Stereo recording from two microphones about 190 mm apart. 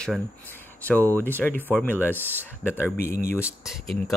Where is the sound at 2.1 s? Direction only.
10° right (ahead or behind).